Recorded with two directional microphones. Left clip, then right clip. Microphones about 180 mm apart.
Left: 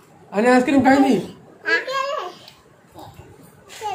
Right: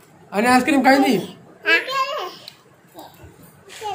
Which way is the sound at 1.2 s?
25° right (ahead or behind).